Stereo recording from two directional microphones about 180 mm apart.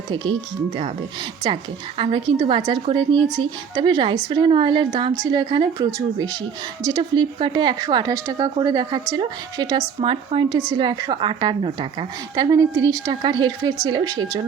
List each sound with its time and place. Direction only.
2.0 s a woman's voice: 30° right (ahead or behind)